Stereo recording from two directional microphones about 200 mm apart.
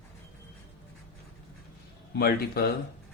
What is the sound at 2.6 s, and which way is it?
Speech, 50° left (ahead or behind).